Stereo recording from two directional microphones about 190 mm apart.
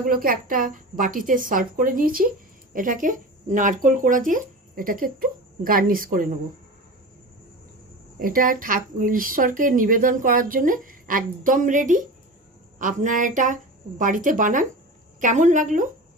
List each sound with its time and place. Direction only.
0.1 s speech: 50° right (ahead or behind)
8.2 s a woman's voice: 45° right (ahead or behind)